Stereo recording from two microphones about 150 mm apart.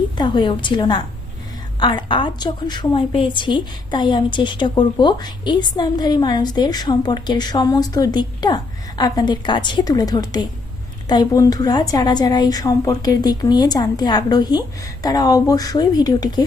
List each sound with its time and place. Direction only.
0.2 s a woman's voice: 30° left (ahead or behind)